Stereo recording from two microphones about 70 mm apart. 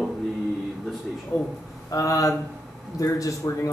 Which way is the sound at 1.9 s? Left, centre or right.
Left.